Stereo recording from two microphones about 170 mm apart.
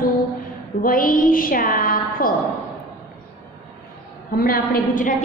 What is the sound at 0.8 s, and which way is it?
A woman's voice, 55° left (ahead or behind).